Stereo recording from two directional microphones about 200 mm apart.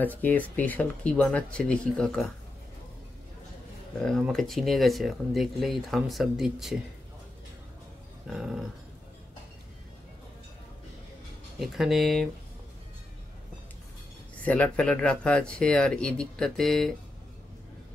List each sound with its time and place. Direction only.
0.0 s speech: 10° left (ahead or behind)
4.0 s speech: centre (ahead or behind)
8.3 s speech: centre (ahead or behind)
11.6 s speech: centre (ahead or behind)
14.4 s speech: 5° left (ahead or behind)